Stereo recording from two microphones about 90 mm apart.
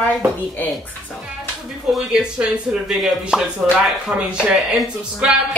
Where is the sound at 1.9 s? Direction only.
5° right (ahead or behind).